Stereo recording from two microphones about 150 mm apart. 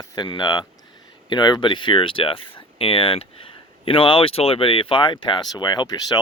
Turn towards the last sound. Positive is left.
turn(degrees=25)  # may be behind; listen again after turning